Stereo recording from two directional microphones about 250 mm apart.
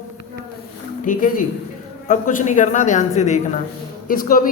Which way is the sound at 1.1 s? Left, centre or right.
Left.